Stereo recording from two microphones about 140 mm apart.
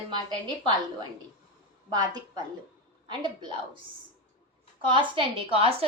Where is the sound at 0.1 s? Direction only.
30° right (ahead or behind).